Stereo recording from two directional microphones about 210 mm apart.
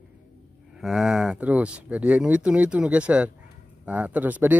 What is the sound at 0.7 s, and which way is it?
Speech, centre (ahead or behind).